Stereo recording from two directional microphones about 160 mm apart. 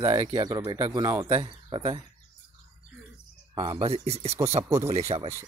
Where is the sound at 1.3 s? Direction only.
30° right (ahead or behind).